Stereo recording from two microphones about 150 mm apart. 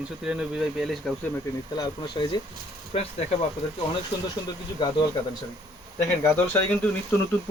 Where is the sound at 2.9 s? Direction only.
45° left (ahead or behind).